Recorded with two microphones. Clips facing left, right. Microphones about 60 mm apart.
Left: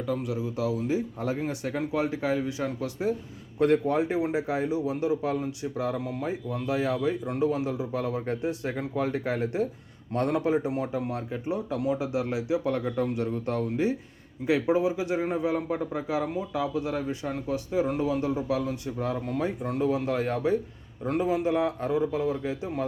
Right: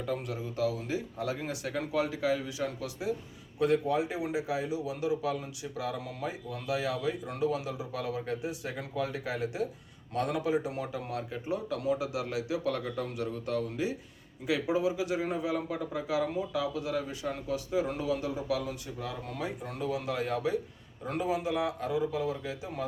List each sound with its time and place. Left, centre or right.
0.0 s a man's voice: centre; by 3.1 s left
3.6 s a man's voice: left